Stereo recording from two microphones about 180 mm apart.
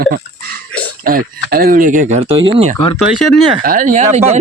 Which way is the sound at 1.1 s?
55° right (ahead or behind).